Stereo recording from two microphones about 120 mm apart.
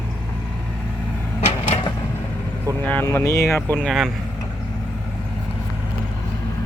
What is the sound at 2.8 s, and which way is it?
Speech, 15° left (ahead or behind).